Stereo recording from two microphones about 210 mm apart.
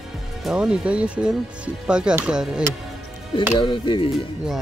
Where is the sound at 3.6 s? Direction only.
25° left (ahead or behind).